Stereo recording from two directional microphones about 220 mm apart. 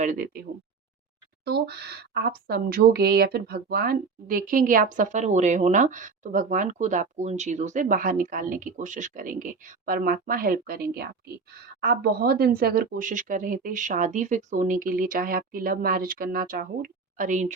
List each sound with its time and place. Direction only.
0.0 s speech: 40° right (ahead or behind)
1.5 s speech: 45° right (ahead or behind)